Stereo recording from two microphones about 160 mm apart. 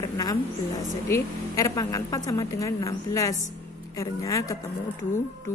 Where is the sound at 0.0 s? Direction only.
20° left (ahead or behind).